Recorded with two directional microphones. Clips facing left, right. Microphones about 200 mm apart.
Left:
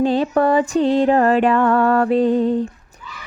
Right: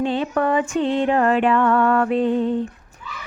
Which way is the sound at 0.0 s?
35° left (ahead or behind).